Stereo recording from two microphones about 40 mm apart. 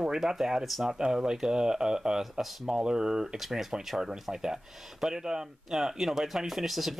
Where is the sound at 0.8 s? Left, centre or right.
Centre.